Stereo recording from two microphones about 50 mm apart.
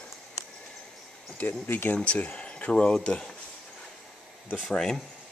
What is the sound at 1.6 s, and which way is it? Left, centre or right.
Speech, left.